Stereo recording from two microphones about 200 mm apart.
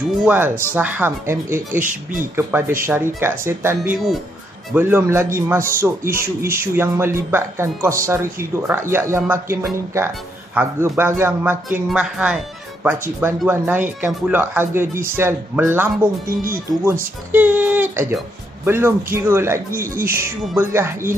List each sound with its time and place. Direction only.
0.2 s speech: 10° right (ahead or behind)
1.8 s speech: 40° right (ahead or behind)
2.8 s speech: 10° right (ahead or behind)